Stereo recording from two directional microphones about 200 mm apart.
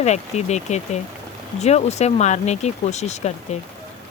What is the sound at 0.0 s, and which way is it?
Speech, 35° left (ahead or behind).